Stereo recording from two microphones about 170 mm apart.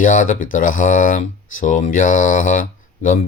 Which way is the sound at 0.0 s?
50° left (ahead or behind).